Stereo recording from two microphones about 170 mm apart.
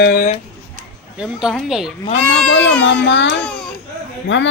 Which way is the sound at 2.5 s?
90° left.